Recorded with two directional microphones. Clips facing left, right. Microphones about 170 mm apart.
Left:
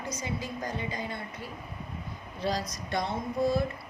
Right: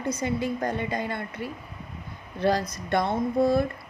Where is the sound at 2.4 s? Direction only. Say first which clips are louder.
Right 7 dB; 55° right (ahead or behind).